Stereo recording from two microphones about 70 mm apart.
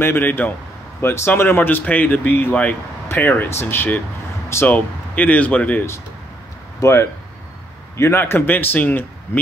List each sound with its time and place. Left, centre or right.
0.0 s speech: left
6.8 s speech: left